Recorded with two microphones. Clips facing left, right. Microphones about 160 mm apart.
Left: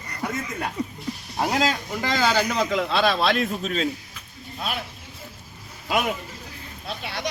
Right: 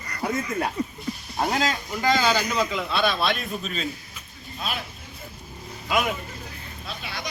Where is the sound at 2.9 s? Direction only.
90° left.